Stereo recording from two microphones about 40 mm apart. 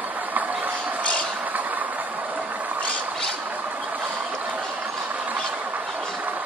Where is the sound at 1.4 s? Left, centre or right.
Right.